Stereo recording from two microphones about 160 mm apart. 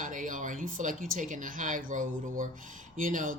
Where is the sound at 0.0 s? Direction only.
55° right (ahead or behind).